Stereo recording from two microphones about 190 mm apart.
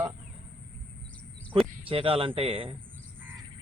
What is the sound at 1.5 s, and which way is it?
Speech, 30° right (ahead or behind).